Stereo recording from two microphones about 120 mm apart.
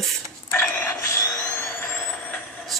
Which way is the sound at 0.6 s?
10° left (ahead or behind).